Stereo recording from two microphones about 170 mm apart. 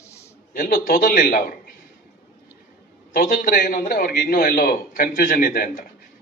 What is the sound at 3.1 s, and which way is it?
A man's voice, 55° left (ahead or behind).